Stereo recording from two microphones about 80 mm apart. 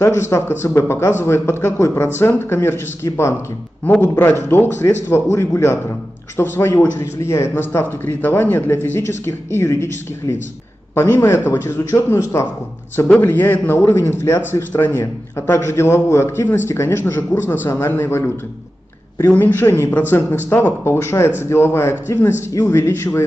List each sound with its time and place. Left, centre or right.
0.0 s a man's voice: left
7.8 s a man's voice: left
13.2 s a man's voice: left